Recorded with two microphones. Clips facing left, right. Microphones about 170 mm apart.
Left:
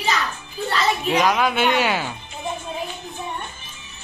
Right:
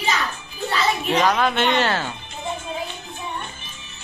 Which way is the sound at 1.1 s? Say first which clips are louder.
Even; 10° left (ahead or behind).